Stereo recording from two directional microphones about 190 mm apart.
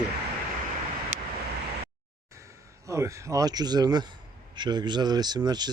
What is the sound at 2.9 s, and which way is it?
Speech, 15° right (ahead or behind).